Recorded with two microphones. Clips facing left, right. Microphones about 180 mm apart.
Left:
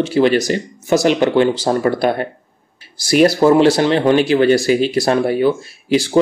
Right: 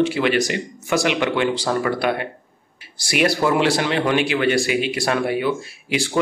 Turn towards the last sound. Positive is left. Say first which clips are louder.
# left 8 dB
turn(degrees=35)  # may be behind; listen again after turning